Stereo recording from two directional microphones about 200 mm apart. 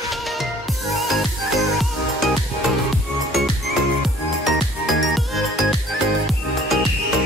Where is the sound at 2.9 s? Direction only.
Centre (ahead or behind).